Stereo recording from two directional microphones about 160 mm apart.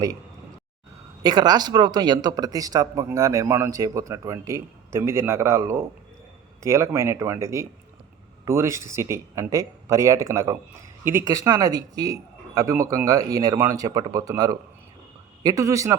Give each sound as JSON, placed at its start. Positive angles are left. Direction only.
{"t": 1.2, "sound": "speech", "side_deg": -25}